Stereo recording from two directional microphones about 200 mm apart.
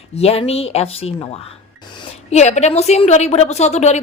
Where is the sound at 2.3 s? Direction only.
35° left (ahead or behind).